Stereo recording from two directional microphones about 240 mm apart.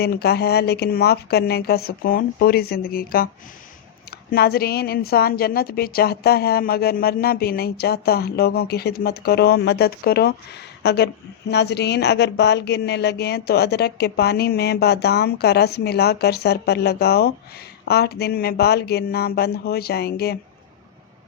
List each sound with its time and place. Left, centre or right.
0.0 s a woman's voice: left
4.3 s a woman's voice: left